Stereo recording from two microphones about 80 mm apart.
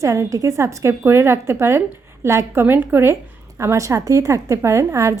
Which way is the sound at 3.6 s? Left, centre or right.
Right.